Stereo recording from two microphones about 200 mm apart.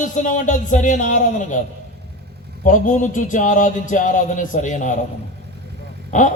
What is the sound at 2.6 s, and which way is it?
A man's voice, 40° left (ahead or behind).